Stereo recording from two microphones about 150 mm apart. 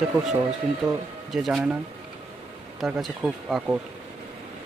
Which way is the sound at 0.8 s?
20° right (ahead or behind).